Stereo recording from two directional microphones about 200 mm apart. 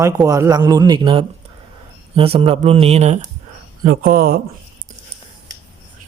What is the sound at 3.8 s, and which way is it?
Speech, 50° right (ahead or behind).